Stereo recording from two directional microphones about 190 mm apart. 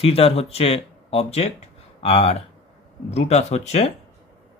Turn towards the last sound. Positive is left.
turn(degrees=35)  # may be behind; listen again after turning